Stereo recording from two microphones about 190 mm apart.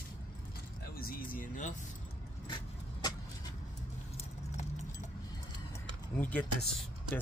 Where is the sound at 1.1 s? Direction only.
45° left (ahead or behind).